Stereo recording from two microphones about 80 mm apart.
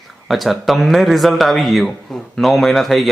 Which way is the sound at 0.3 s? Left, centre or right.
Centre.